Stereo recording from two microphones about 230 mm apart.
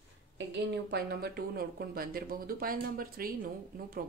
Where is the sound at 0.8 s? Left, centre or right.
Right.